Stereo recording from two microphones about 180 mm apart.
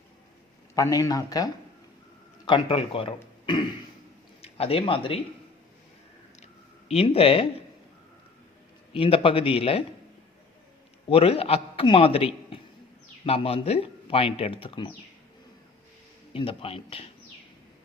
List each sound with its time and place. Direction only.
0.8 s a man's voice: 20° left (ahead or behind)
3.4 s a sound: 25° left (ahead or behind)
4.4 s speech: 35° left (ahead or behind)
6.4 s a sound: 35° left (ahead or behind)
8.9 s speech: 30° left (ahead or behind)
11.1 s speech: 35° left (ahead or behind)
16.3 s speech: 30° left (ahead or behind)